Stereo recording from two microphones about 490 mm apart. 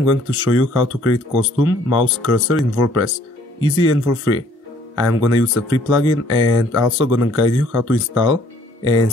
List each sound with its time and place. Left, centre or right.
0.0 s speech: left